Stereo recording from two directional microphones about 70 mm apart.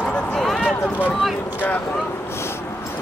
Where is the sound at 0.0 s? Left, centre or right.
Centre.